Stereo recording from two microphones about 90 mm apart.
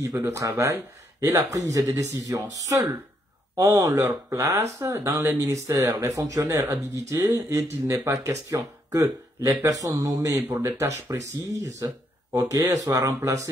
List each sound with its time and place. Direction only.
0.0 s speech: 35° right (ahead or behind)
10.4 s speech: 25° right (ahead or behind)
11.1 s speech: 35° right (ahead or behind)